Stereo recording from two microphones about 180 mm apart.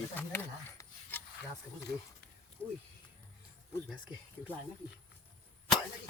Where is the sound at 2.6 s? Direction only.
15° right (ahead or behind).